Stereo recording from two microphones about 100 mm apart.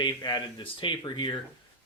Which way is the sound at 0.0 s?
45° left (ahead or behind).